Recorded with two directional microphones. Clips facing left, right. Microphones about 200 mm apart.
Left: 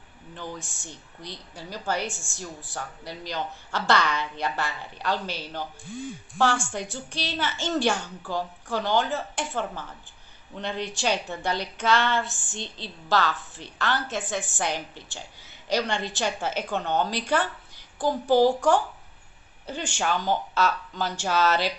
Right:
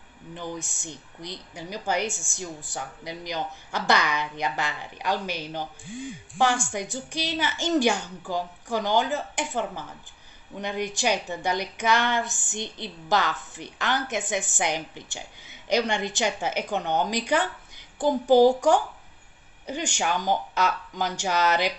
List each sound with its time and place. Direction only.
0.3 s a woman's voice: 15° right (ahead or behind)